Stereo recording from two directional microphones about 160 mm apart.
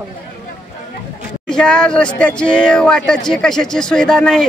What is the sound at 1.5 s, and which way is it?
Speech, 5° left (ahead or behind).